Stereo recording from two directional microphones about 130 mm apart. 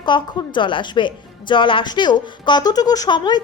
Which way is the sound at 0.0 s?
35° left (ahead or behind).